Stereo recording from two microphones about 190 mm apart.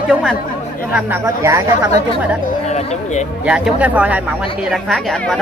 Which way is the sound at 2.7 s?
35° left (ahead or behind).